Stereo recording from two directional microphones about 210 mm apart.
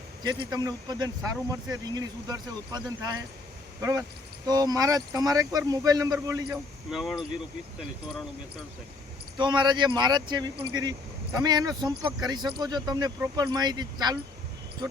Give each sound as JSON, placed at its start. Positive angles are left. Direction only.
{"t": 0.2, "sound": "speech", "side_deg": -20}
{"t": 4.4, "sound": "speech", "side_deg": -15}
{"t": 6.9, "sound": "speech", "side_deg": 0}
{"t": 9.4, "sound": "speech", "side_deg": -20}